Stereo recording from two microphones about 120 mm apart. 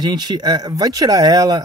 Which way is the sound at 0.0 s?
35° right (ahead or behind).